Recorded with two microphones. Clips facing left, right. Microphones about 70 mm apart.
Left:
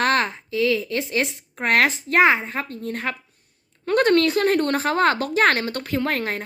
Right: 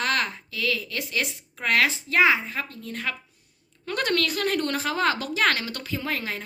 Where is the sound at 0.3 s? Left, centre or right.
Left.